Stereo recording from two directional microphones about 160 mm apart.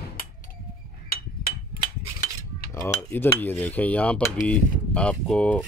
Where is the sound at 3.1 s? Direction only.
10° left (ahead or behind).